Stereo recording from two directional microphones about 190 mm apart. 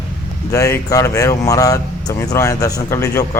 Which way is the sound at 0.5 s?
15° left (ahead or behind).